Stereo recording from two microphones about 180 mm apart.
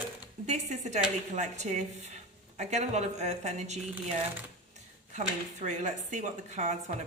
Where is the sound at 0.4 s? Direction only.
40° right (ahead or behind).